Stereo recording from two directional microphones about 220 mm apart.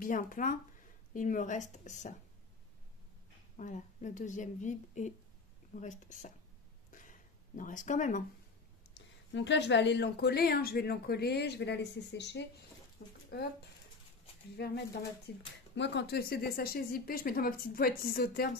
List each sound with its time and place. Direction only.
0.0 s a woman's voice: 40° left (ahead or behind)
3.5 s a woman's voice: 35° left (ahead or behind)
6.9 s a sound: 35° left (ahead or behind)
8.9 s speech: 55° left (ahead or behind)
13.0 s a sound: 45° left (ahead or behind)
14.6 s speech: 50° left (ahead or behind)